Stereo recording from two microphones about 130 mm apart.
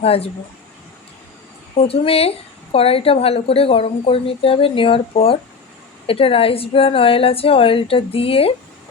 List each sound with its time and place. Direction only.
0.0 s a woman's voice: 50° left (ahead or behind)
1.7 s a woman's voice: 50° left (ahead or behind)